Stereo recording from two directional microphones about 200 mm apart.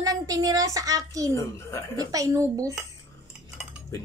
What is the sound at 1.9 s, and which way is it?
Speech, 15° right (ahead or behind).